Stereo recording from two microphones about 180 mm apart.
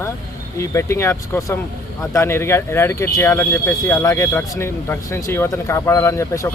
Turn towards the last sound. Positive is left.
turn(degrees=15)  # may be behind; listen again after turning